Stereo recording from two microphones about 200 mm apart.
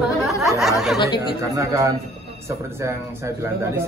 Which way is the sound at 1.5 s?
15° right (ahead or behind).